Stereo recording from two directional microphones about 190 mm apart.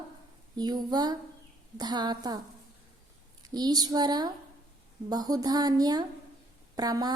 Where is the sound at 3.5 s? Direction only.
20° right (ahead or behind).